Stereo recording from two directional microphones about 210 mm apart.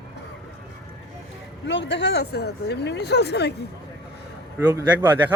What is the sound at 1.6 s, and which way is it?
Speech, 60° left (ahead or behind).